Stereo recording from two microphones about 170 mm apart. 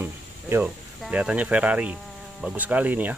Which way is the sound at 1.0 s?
5° right (ahead or behind).